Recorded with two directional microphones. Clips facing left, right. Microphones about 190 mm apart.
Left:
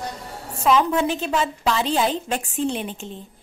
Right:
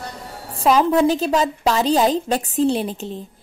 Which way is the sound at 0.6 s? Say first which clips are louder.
Right 4 dB; 35° right (ahead or behind).